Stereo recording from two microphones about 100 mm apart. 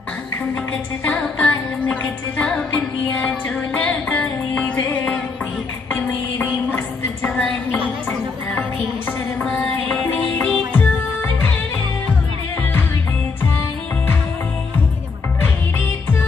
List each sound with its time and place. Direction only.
1.0 s music: 10° left (ahead or behind)
9.4 s music: 5° left (ahead or behind)